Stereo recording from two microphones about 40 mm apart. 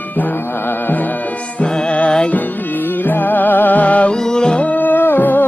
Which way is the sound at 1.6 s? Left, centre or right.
Left.